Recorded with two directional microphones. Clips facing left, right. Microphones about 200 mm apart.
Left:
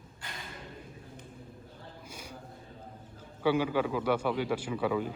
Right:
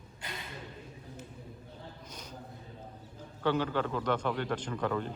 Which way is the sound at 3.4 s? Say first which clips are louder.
Left 3 dB; 10° left (ahead or behind).